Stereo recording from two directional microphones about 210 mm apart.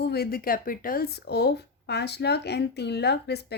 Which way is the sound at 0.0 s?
50° left (ahead or behind).